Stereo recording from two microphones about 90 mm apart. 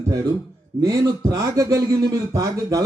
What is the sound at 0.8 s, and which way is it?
A man's voice, 40° right (ahead or behind).